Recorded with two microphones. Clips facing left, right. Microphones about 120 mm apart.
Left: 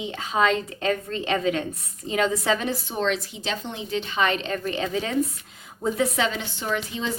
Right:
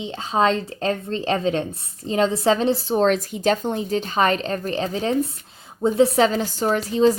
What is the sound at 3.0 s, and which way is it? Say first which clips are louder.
A woman's voice: right 7 dB; 45° right (ahead or behind).